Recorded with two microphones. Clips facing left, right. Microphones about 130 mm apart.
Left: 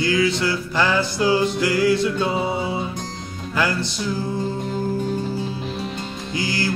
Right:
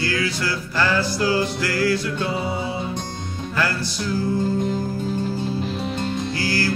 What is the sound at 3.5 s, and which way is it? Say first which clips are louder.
Music: left 2 dB; 15° left (ahead or behind).